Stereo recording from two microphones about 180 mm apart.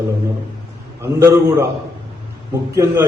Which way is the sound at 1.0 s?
15° right (ahead or behind).